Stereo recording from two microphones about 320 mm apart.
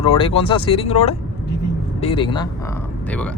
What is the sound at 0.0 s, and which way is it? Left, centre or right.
Speech, centre.